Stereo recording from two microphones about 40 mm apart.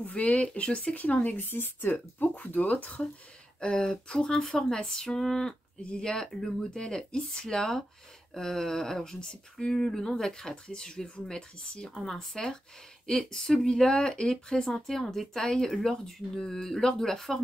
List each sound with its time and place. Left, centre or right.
0.1 s speech: left
1.4 s speech: left
2.3 s speech: left
3.6 s speech: centre
11.9 s speech: centre